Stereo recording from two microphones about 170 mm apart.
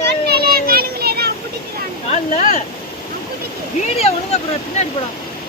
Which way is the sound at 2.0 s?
45° left (ahead or behind).